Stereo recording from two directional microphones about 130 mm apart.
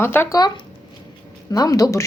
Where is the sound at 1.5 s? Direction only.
25° left (ahead or behind).